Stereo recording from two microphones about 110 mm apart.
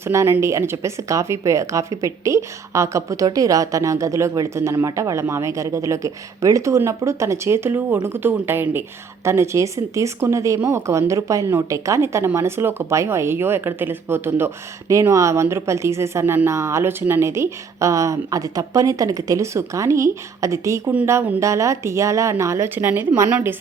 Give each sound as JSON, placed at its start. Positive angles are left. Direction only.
{"t": 0.0, "sound": "speech", "side_deg": -25}